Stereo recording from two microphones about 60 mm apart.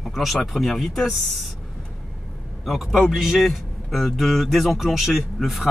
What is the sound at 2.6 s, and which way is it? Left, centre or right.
Speech, centre.